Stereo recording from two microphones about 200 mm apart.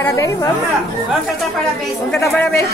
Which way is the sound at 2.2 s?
10° left (ahead or behind).